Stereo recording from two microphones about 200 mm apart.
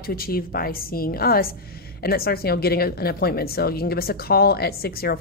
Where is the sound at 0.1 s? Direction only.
45° left (ahead or behind).